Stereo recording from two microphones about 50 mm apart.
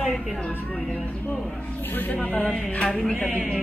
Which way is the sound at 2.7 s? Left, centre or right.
Centre.